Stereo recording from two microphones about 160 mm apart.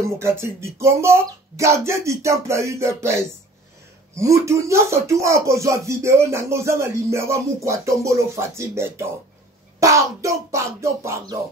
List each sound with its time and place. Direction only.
0.0 s speech: 15° right (ahead or behind)